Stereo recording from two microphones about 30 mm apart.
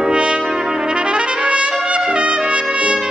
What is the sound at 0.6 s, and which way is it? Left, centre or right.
Trumpet, right.